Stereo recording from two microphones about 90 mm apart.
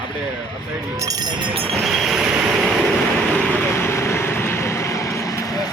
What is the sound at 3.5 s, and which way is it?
Vehicle, 25° left (ahead or behind).